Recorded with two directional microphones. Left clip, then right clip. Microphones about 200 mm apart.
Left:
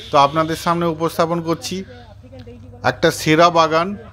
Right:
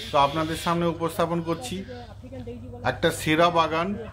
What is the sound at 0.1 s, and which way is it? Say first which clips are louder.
A man's voice: left 8 dB; 35° left (ahead or behind).